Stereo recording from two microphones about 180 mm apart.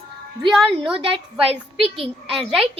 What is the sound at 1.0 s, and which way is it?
A child's voice, 30° right (ahead or behind).